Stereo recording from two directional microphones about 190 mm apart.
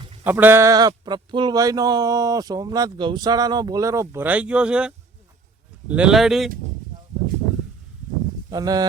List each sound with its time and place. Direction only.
0.3 s speech: 10° right (ahead or behind)
8.4 s speech: 20° right (ahead or behind)